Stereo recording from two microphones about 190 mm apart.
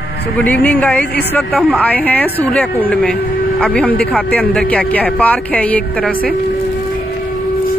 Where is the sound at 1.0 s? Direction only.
60° left (ahead or behind).